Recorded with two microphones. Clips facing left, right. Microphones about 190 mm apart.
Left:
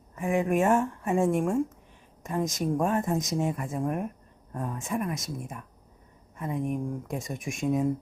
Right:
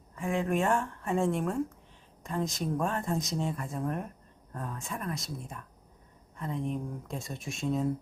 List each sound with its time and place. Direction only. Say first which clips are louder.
0.2 s speech: left 4 dB; 15° left (ahead or behind)